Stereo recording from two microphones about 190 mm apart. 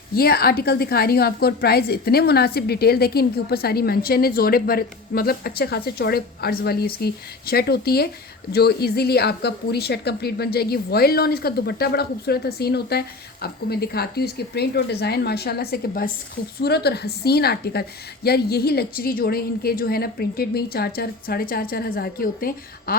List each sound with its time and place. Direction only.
0.1 s a woman's voice: 55° left (ahead or behind)